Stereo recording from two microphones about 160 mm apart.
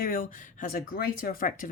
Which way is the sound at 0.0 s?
60° left (ahead or behind).